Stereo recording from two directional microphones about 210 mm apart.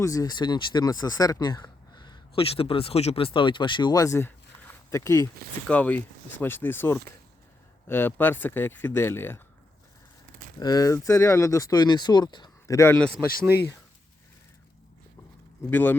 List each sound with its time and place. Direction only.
0.0 s speech: 15° left (ahead or behind)
10.6 s speech: 20° left (ahead or behind)
15.7 s speech: 10° left (ahead or behind)